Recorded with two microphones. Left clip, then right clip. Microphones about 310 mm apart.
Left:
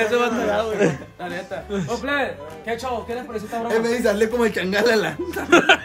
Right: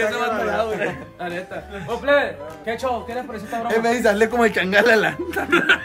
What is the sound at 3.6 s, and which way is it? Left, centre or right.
Speech, right.